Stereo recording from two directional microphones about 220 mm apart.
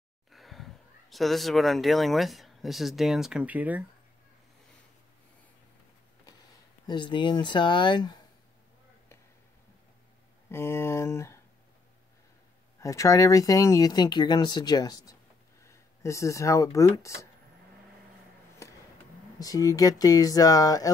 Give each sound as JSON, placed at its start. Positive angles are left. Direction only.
{"t": 0.3, "sound": "speech", "side_deg": 0}
{"t": 6.9, "sound": "speech", "side_deg": 20}
{"t": 10.5, "sound": "speech", "side_deg": 10}
{"t": 12.8, "sound": "speech", "side_deg": 15}
{"t": 19.4, "sound": "speech", "side_deg": 15}